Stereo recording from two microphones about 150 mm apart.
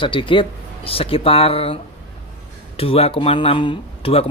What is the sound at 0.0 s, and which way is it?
Speech, 35° left (ahead or behind).